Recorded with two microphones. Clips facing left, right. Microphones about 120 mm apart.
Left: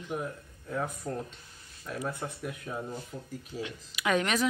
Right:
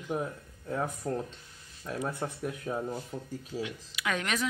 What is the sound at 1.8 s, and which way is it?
Speech, 20° right (ahead or behind).